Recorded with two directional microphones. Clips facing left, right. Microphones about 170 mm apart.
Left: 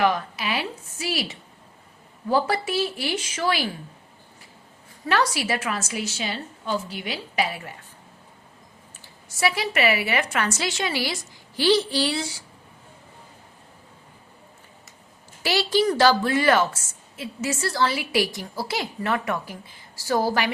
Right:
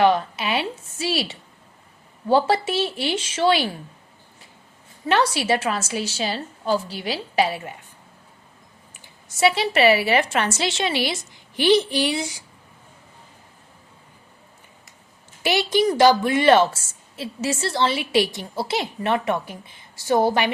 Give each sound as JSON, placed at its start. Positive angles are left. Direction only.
{"t": 0.0, "sound": "a woman's voice", "side_deg": -25}
{"t": 5.0, "sound": "a woman's voice", "side_deg": -25}
{"t": 9.4, "sound": "a woman's voice", "side_deg": -25}
{"t": 15.4, "sound": "a woman's voice", "side_deg": -20}